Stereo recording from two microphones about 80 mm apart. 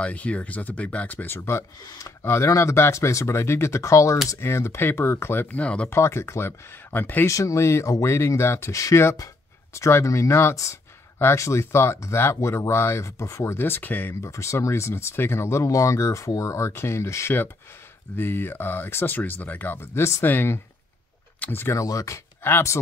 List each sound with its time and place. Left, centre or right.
0.0 s speech: centre
1.8 s speech: left
2.0 s speech: left
5.6 s speech: centre
5.9 s speech: left
7.2 s speech: left
14.2 s speech: left
21.7 s speech: left